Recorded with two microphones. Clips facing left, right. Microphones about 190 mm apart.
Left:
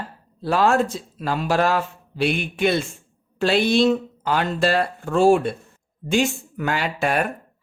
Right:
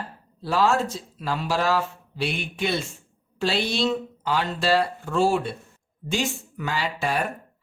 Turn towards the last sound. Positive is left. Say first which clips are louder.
# left 4 dB
turn(degrees=60)  # may be behind; listen again after turning